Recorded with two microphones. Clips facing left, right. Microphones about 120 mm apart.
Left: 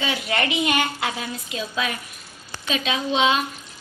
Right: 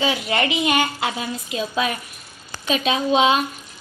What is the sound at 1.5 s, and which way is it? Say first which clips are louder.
A child's voice: right 4 dB; 35° right (ahead or behind).